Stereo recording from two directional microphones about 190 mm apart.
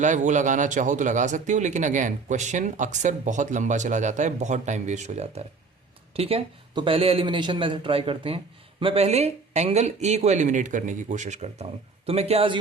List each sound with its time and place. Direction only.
0.0 s a man's voice: 40° right (ahead or behind)